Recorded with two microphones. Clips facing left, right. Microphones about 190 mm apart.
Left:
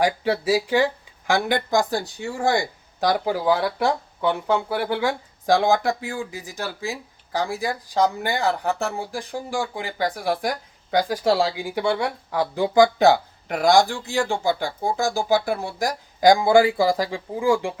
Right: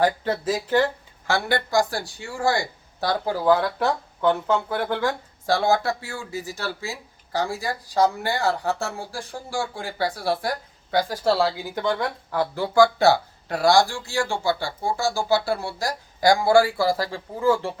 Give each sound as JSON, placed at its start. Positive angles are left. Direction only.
{"t": 0.0, "sound": "speech", "side_deg": 10}